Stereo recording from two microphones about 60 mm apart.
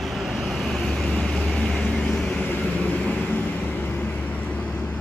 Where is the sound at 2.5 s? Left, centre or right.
Left.